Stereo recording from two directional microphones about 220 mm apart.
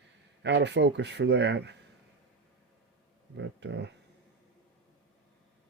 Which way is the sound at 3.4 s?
50° right (ahead or behind).